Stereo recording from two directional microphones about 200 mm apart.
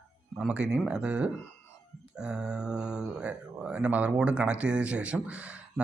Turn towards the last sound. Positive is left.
turn(degrees=-5)  # may be behind; listen again after turning